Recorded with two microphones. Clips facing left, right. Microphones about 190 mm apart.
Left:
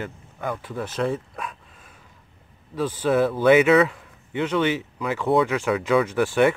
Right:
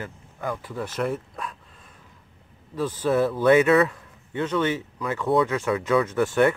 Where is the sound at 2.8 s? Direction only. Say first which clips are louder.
Left 1 dB; 5° left (ahead or behind).